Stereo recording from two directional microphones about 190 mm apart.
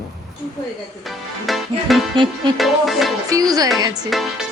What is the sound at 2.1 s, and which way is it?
Music, 25° right (ahead or behind).